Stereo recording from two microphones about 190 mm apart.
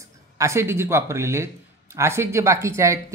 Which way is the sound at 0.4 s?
15° right (ahead or behind).